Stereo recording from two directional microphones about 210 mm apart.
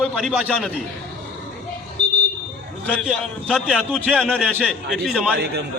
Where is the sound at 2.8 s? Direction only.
5° left (ahead or behind).